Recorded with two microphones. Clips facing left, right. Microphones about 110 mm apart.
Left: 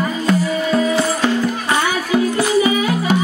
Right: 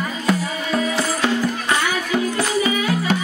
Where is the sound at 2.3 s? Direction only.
15° left (ahead or behind).